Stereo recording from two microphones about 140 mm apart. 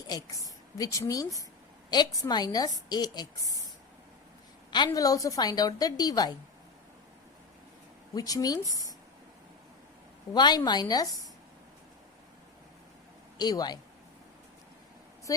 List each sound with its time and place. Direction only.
0.1 s a woman's voice: 25° left (ahead or behind)
4.9 s a woman's voice: 25° left (ahead or behind)
8.1 s a woman's voice: 25° left (ahead or behind)
10.3 s a woman's voice: 30° left (ahead or behind)
13.4 s a woman's voice: 30° left (ahead or behind)